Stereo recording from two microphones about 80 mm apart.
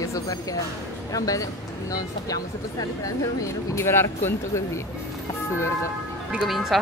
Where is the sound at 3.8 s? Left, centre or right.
Left.